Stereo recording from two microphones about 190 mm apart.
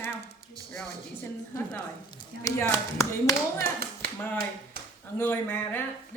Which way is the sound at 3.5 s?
50° right (ahead or behind).